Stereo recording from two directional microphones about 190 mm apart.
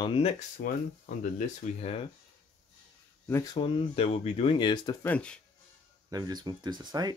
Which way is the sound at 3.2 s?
15° left (ahead or behind).